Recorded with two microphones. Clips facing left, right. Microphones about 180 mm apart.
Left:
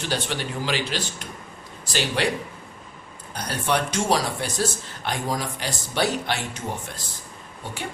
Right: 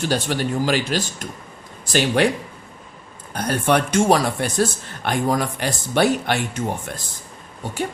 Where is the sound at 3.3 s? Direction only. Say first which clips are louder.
Right 6 dB; 55° right (ahead or behind).